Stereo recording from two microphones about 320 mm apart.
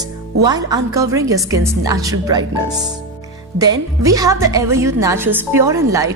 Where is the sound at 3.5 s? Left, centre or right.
Centre.